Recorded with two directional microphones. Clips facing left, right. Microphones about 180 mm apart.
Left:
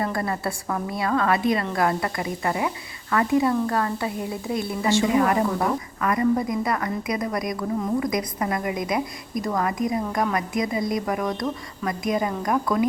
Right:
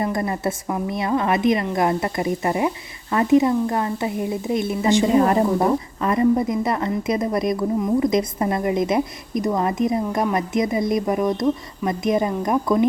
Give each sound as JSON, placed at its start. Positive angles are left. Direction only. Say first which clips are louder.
{"t": 0.0, "sound": "a woman's voice", "louder": "right 3 dB", "side_deg": -20}
{"t": 5.0, "sound": "a woman's voice", "louder": "right 4 dB", "side_deg": -30}